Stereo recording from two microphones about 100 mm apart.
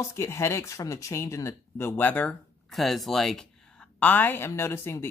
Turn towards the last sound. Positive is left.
turn(degrees=25)  # may be behind; listen again after turning